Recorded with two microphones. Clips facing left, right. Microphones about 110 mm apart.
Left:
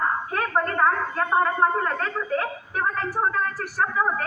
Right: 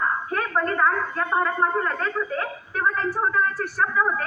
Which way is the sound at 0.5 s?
35° left (ahead or behind).